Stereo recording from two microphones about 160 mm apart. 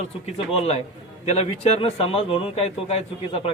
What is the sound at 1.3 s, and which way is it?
Speech, 40° left (ahead or behind).